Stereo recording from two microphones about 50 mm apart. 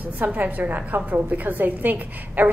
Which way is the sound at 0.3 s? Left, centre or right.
Right.